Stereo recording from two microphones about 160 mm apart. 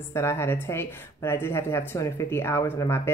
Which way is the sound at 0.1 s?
15° left (ahead or behind).